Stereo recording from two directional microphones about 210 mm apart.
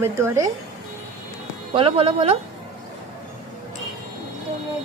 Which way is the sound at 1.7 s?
25° right (ahead or behind).